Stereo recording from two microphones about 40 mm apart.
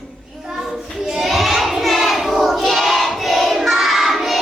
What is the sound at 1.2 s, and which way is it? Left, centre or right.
Child singing, centre.